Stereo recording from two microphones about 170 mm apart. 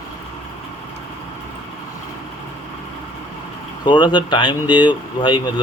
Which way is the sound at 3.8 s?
25° left (ahead or behind).